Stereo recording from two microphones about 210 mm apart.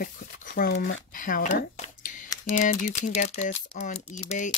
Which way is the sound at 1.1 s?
40° left (ahead or behind).